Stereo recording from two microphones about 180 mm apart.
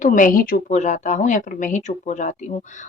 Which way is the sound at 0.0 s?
45° left (ahead or behind).